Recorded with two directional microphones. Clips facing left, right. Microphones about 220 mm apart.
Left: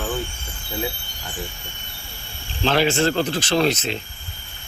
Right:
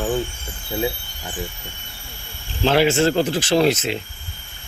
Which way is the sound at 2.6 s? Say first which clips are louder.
Right 3 dB; 10° right (ahead or behind).